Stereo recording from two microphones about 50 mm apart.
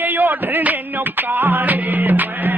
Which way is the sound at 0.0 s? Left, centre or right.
Right.